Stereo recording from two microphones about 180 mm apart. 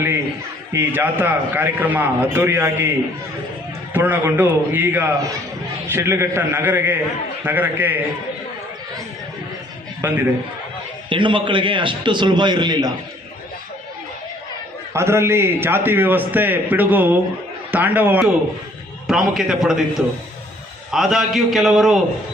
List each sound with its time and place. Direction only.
0.7 s a man's voice: 10° right (ahead or behind)
3.9 s a man's voice: 10° right (ahead or behind)
10.0 s a man's voice: 10° right (ahead or behind)
11.1 s a man's voice: 30° right (ahead or behind)
14.9 s a man's voice: 15° right (ahead or behind)
20.9 s a man's voice: centre (ahead or behind)